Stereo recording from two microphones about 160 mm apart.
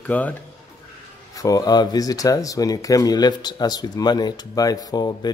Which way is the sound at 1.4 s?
25° left (ahead or behind).